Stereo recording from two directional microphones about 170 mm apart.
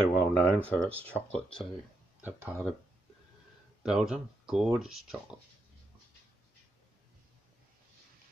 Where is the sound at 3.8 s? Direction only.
5° right (ahead or behind).